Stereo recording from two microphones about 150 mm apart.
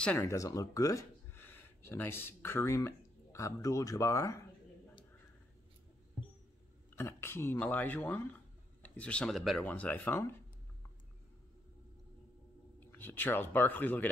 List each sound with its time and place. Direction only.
0.0 s speech: 10° left (ahead or behind)
7.0 s speech: 15° left (ahead or behind)
12.8 s speech: 15° left (ahead or behind)